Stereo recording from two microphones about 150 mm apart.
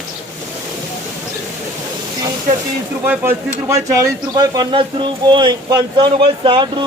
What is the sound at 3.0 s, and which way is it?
Speech, 15° right (ahead or behind).